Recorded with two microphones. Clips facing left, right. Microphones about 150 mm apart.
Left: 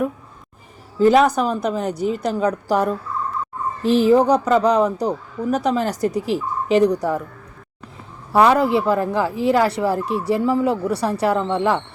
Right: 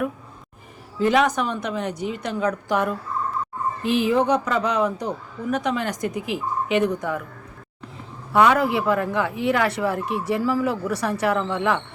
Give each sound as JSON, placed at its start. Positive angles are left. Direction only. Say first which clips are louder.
{"t": 0.9, "sound": "speech", "louder": "left 5 dB", "side_deg": 35}
{"t": 8.3, "sound": "speech", "louder": "left 3 dB", "side_deg": 30}